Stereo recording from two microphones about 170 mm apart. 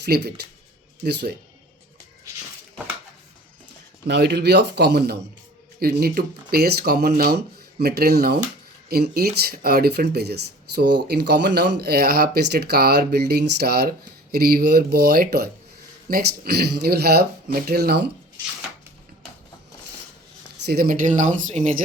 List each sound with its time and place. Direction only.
0.0 s speech: 75° right (ahead or behind)
4.0 s speech: 80° right
20.7 s speech: 60° right (ahead or behind)